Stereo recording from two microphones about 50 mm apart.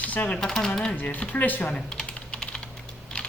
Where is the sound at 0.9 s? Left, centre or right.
Left.